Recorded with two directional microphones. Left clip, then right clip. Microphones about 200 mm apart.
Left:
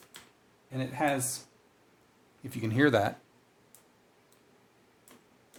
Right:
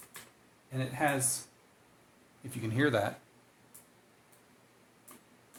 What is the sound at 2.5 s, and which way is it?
Speech, 50° left (ahead or behind).